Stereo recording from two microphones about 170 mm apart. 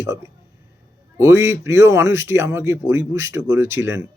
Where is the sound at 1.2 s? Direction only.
15° right (ahead or behind).